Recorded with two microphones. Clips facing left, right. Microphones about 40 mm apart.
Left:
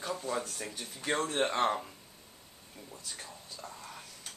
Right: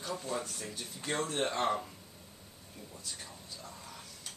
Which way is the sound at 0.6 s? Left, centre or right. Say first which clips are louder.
Left 1 dB; left.